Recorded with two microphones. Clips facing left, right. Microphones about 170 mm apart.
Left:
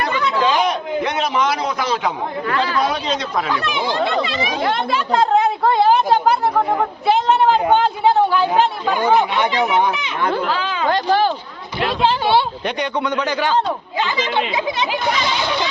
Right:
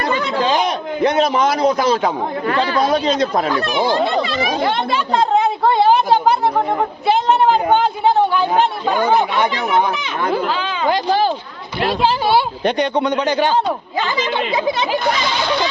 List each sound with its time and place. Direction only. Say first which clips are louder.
0.0 s a sound: even; 35° right (ahead or behind)
1.0 s speech: right 7 dB; 40° right (ahead or behind)
2.5 s speech: right 2 dB; 25° right (ahead or behind)
2.7 s speech: right 4 dB; 40° right (ahead or behind)
4.6 s a woman's voice: right 1 dB; centre (ahead or behind)
9.0 s speech: left 1 dB; 45° right (ahead or behind)
12.6 s speech: right 5 dB; 35° right (ahead or behind)
13.9 s speech: left 2 dB; 40° right (ahead or behind)